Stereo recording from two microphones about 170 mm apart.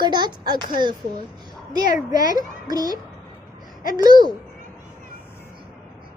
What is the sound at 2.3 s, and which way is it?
Speech, 25° right (ahead or behind).